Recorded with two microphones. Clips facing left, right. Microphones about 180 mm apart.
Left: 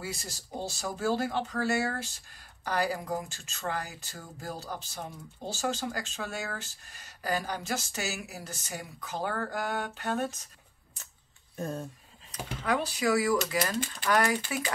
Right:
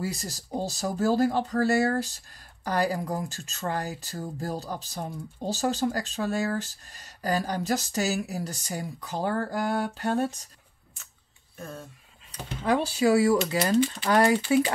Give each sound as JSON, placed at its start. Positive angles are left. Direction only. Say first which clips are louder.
{"t": 0.0, "sound": "speech", "louder": "right 6 dB", "side_deg": -40}
{"t": 11.5, "sound": "speech", "louder": "left 5 dB", "side_deg": 35}
{"t": 12.3, "sound": "speech", "louder": "right 4 dB", "side_deg": -30}